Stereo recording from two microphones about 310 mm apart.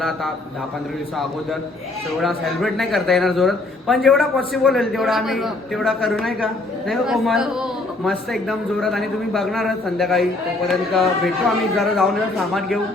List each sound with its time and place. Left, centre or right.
2.2 s a man's voice: centre